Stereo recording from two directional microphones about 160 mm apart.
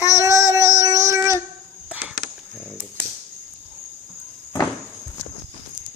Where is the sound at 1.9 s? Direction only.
10° right (ahead or behind).